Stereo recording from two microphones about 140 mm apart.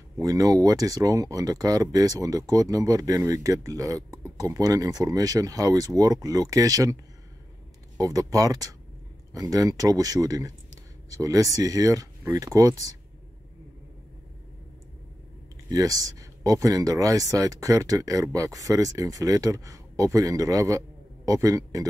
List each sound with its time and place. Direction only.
0.2 s speech: 25° right (ahead or behind)
8.0 s speech: 25° right (ahead or behind)
15.7 s speech: 25° right (ahead or behind)